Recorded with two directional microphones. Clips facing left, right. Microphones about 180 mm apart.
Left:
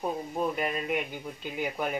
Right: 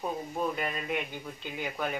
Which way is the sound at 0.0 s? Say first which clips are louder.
Left 2 dB; 15° left (ahead or behind).